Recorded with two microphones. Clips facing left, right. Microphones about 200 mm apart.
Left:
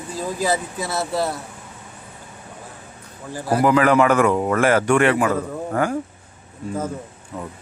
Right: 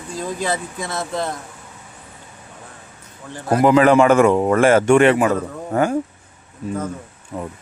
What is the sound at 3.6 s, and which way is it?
A man's voice, 25° right (ahead or behind).